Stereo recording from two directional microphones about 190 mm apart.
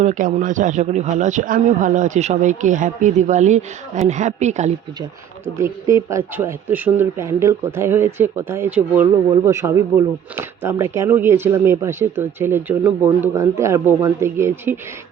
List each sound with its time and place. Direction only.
0.0 s speech: 45° right (ahead or behind)
5.5 s speech: 15° right (ahead or behind)